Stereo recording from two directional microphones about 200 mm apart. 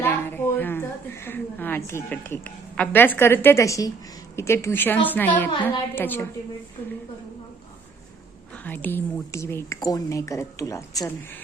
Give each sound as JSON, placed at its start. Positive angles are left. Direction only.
{"t": 0.0, "sound": "a woman's voice", "side_deg": 10}
{"t": 8.5, "sound": "a woman's voice", "side_deg": 10}